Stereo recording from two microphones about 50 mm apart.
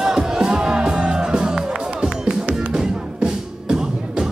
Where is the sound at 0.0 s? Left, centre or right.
Centre.